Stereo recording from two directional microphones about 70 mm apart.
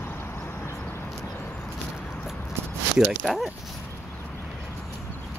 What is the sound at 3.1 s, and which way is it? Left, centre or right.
Speech, centre.